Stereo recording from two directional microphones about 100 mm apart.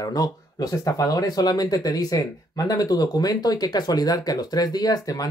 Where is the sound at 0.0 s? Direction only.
40° left (ahead or behind).